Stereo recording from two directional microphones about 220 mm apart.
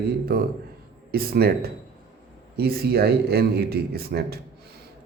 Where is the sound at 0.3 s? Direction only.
45° right (ahead or behind).